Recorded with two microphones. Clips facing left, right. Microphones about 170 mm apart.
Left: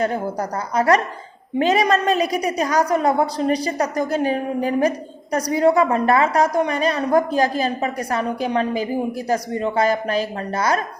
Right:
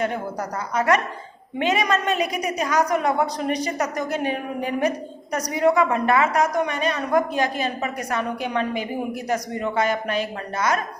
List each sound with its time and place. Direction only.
0.0 s a woman's voice: 35° left (ahead or behind)